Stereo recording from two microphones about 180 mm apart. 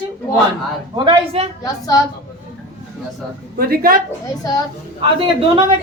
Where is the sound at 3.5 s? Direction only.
55° right (ahead or behind).